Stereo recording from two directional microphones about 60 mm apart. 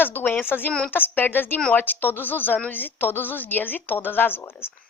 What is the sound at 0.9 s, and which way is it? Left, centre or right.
A woman's voice, left.